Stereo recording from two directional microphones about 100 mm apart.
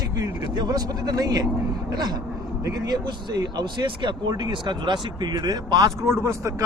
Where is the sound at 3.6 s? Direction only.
50° right (ahead or behind).